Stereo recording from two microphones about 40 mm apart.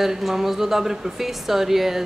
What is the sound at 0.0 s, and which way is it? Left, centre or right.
A woman's voice, centre.